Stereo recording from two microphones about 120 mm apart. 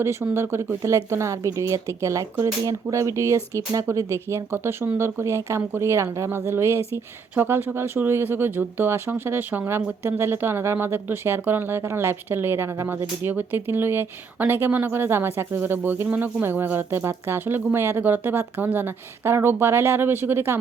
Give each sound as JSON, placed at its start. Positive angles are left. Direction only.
{"t": 0.0, "sound": "speech", "side_deg": -20}